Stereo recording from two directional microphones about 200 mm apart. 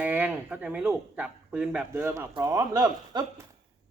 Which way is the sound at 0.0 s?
10° right (ahead or behind).